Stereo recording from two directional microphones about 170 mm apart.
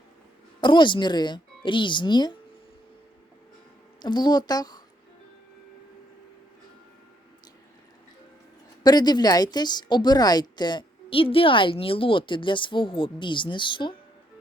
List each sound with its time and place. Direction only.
0.6 s a woman's voice: 25° left (ahead or behind)
4.0 s a woman's voice: 25° left (ahead or behind)
8.8 s a woman's voice: 25° left (ahead or behind)